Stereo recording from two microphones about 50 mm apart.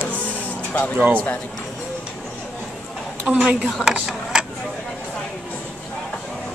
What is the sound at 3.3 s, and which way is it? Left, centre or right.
Speech, centre.